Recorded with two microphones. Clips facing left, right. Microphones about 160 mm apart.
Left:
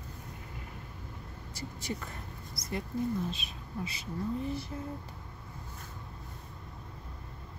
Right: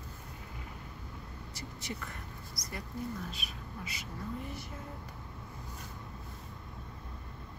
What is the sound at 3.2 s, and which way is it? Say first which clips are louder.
Speech: left 4 dB; 25° left (ahead or behind).